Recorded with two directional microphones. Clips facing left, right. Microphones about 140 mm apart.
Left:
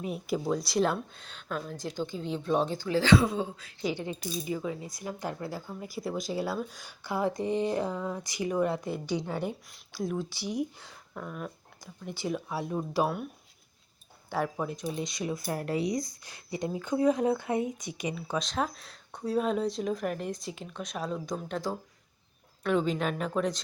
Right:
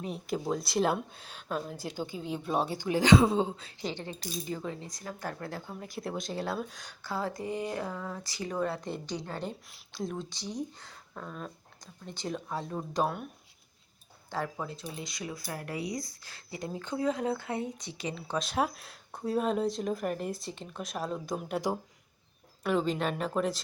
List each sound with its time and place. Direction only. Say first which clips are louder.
0.0 s a woman's voice: left 2 dB; 5° left (ahead or behind); by 3.7 s 25° right (ahead or behind)
3.8 s speech: left 4 dB; 10° left (ahead or behind)
7.0 s speech: left 5 dB; 15° left (ahead or behind)
14.3 s speech: left 4 dB; 15° left (ahead or behind)
18.4 s speech: right 1 dB; 5° right (ahead or behind)
22.6 s speech: left 1 dB; centre (ahead or behind)